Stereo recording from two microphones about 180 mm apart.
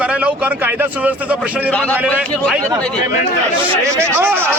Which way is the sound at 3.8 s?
15° right (ahead or behind).